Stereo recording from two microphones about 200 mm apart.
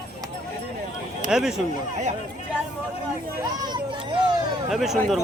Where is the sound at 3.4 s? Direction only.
20° right (ahead or behind).